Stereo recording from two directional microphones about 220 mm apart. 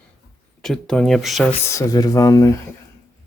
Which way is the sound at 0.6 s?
Centre (ahead or behind).